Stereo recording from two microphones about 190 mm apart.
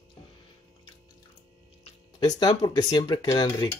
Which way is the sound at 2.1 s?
20° left (ahead or behind).